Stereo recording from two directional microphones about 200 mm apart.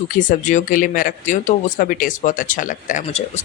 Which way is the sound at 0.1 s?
40° left (ahead or behind).